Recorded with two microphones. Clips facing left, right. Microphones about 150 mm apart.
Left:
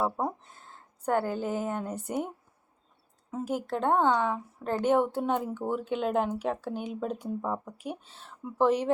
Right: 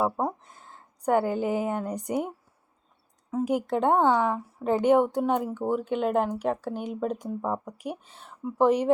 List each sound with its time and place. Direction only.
0.0 s a sound: 10° right (ahead or behind)
1.0 s speech: 15° right (ahead or behind)
3.4 s speech: 15° right (ahead or behind)
4.0 s speech: 5° right (ahead or behind)